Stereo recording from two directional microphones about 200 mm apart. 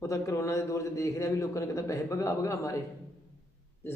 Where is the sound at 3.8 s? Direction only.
10° left (ahead or behind).